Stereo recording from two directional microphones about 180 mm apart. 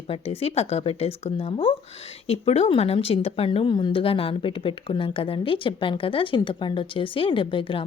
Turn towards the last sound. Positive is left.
turn(degrees=30)  # may be behind; listen again after turning